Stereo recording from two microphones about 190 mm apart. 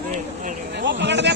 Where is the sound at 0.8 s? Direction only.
70° right (ahead or behind).